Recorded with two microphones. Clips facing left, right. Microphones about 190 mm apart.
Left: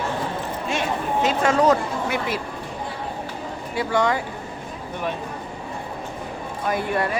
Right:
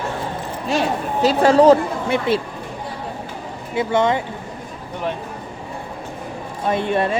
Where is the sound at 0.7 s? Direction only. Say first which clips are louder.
Right 4 dB; 35° right (ahead or behind).